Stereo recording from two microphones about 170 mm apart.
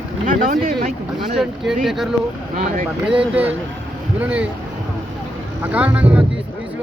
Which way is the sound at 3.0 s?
10° right (ahead or behind).